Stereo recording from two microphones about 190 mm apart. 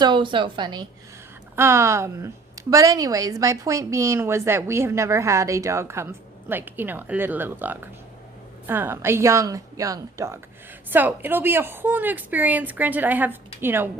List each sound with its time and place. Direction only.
0.0 s a woman's voice: 25° right (ahead or behind)